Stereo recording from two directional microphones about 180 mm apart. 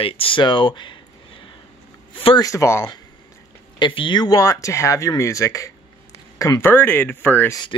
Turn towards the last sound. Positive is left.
turn(degrees=10)  # may be behind; listen again after turning